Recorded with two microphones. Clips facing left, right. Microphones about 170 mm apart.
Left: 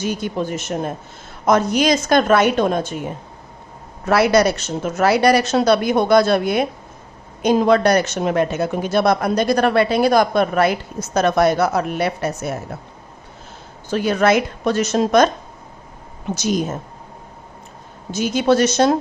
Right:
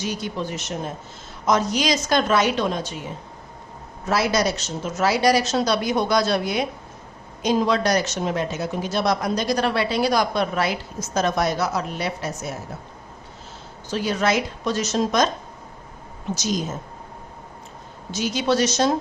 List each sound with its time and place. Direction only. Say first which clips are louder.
0.0 s a woman's voice: left 5 dB; 50° left (ahead or behind)
4.0 s speech: left 7 dB; 65° left (ahead or behind)
13.9 s speech: left 6 dB; 55° left (ahead or behind)
16.3 s speech: left 5 dB; 60° left (ahead or behind)
18.1 s a woman's voice: left 5 dB; 50° left (ahead or behind)